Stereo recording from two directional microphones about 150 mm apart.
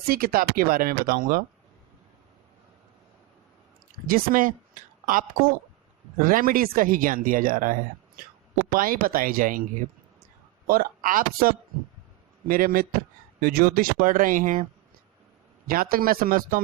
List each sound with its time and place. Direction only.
0.1 s speech: 80° right
4.0 s speech: 70° right (ahead or behind)
10.7 s speech: 70° right (ahead or behind)
15.6 s speech: 75° right (ahead or behind)